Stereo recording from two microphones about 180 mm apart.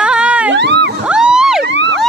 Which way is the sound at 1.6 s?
80° right.